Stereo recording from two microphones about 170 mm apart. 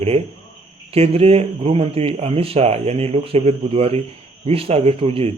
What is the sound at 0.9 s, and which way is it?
A man's voice, 35° right (ahead or behind).